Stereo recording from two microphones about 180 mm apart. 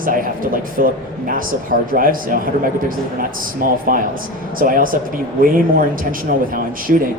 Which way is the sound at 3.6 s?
50° right (ahead or behind).